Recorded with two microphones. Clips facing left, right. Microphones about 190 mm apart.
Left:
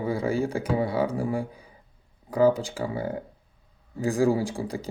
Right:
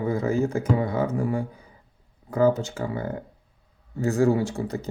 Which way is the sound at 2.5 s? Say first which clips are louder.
Right 1 dB; 30° left (ahead or behind).